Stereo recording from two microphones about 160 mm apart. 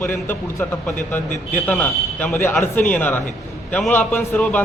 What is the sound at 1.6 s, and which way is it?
A man's voice, 10° left (ahead or behind).